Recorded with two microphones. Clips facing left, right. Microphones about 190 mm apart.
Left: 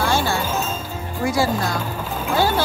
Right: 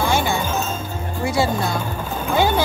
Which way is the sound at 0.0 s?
20° right (ahead or behind).